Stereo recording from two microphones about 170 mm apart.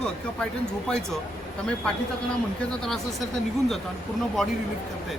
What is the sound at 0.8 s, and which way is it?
Speech, 5° left (ahead or behind).